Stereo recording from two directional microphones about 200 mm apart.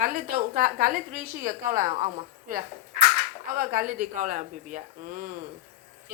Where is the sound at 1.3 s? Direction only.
15° right (ahead or behind).